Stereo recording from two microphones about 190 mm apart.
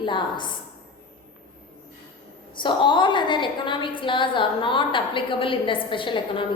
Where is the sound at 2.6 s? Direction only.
25° left (ahead or behind).